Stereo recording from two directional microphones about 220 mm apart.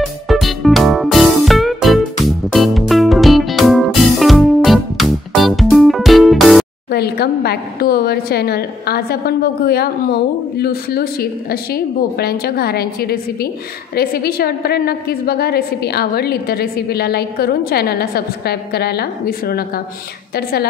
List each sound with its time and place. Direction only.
0.0 s music: centre (ahead or behind)
6.9 s a woman's voice: 45° left (ahead or behind)